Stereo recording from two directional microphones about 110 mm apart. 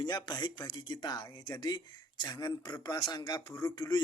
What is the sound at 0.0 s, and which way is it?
Speech, 40° left (ahead or behind).